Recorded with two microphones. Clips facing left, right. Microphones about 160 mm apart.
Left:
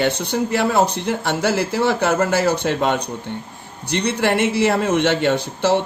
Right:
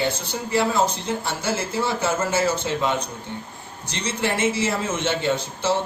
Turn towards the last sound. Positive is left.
turn(degrees=70)  # may be behind; listen again after turning